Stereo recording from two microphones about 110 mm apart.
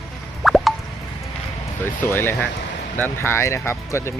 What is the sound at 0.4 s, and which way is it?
Plop, centre (ahead or behind).